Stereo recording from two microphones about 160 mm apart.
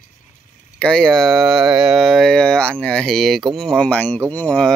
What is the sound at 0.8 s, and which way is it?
Speech, 5° left (ahead or behind).